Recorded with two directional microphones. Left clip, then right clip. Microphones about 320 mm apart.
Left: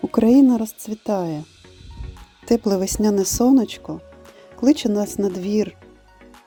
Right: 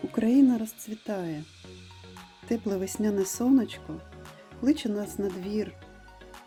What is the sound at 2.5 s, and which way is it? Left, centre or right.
Speech, centre.